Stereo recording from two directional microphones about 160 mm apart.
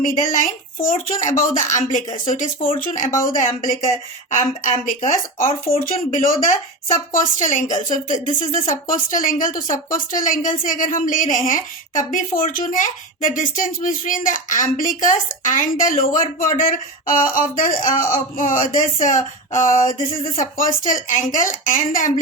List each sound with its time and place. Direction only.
0.0 s a woman's voice: 55° left (ahead or behind)
4.3 s a woman's voice: 50° left (ahead or behind)